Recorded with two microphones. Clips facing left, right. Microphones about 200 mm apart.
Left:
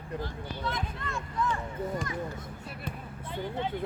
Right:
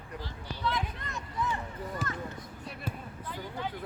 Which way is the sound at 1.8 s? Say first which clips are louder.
Left 6 dB; 25° left (ahead or behind).